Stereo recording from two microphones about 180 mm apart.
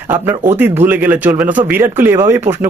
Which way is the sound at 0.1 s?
10° right (ahead or behind).